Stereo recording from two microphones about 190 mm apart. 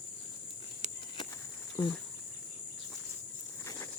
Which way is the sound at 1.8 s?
25° left (ahead or behind).